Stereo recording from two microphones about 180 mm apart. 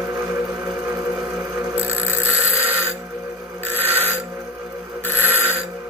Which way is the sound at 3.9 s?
10° right (ahead or behind).